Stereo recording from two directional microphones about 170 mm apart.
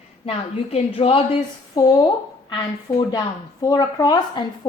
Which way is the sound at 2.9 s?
15° left (ahead or behind).